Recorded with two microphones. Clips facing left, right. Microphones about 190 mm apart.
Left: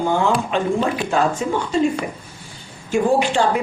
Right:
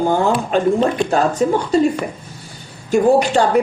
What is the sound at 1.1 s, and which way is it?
Speech, 40° right (ahead or behind).